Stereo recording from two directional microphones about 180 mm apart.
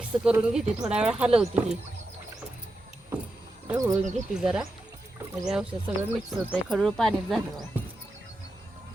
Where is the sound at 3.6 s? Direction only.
20° right (ahead or behind).